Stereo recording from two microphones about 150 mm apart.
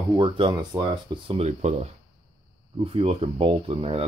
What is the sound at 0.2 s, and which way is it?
Speech, 35° right (ahead or behind).